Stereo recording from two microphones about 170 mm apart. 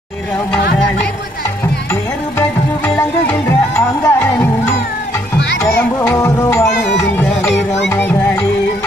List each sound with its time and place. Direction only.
1.6 s music: 10° left (ahead or behind)